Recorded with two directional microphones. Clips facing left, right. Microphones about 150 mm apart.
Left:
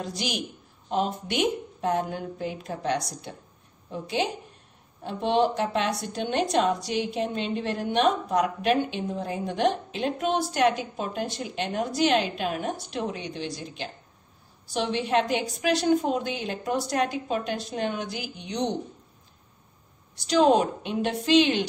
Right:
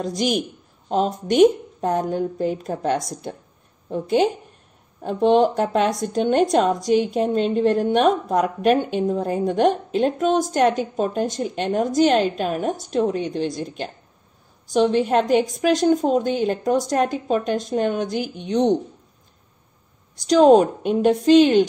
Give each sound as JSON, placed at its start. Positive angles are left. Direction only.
{"t": 0.0, "sound": "a woman's voice", "side_deg": -45}
{"t": 20.2, "sound": "a woman's voice", "side_deg": -45}